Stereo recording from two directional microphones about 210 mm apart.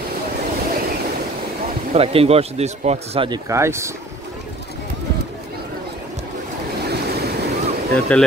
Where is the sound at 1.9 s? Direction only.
30° right (ahead or behind).